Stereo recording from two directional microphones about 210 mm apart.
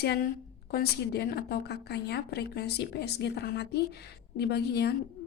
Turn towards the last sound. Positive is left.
turn(degrees=50)  # may be behind; listen again after turning